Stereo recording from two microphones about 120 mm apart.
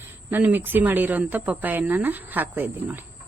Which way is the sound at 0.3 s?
15° right (ahead or behind).